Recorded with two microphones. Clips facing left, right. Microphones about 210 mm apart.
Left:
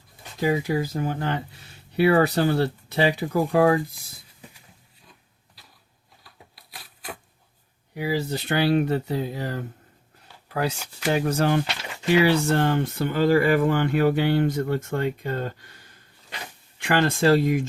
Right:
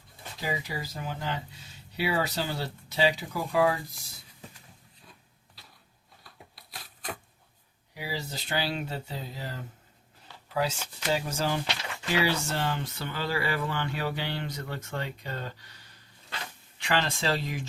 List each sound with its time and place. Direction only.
0.3 s speech: 50° left (ahead or behind)
6.2 s a sound: centre (ahead or behind)
7.9 s speech: 55° left (ahead or behind)